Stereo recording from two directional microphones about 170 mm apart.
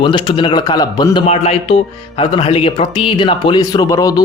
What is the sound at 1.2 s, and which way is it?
Speech, 40° left (ahead or behind).